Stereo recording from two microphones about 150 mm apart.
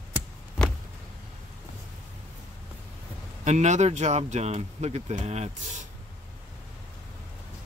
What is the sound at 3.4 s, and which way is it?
Speech, 50° right (ahead or behind).